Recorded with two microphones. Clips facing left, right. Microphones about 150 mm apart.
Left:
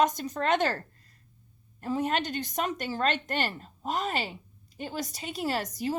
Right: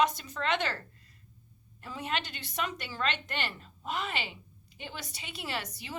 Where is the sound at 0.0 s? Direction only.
45° left (ahead or behind).